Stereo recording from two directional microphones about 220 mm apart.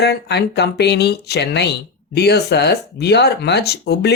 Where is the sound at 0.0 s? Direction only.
50° left (ahead or behind).